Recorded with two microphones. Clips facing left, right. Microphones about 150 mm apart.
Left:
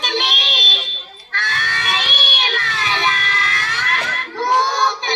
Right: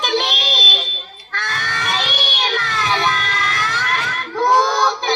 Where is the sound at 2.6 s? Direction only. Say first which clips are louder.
Right 2 dB; 50° right (ahead or behind).